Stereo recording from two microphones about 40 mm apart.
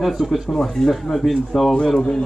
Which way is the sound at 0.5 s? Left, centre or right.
Centre.